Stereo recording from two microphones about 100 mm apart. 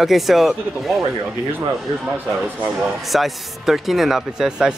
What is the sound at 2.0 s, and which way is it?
Speech, 15° right (ahead or behind).